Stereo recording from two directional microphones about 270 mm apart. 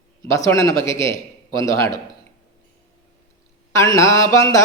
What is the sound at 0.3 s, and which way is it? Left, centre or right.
Music, centre.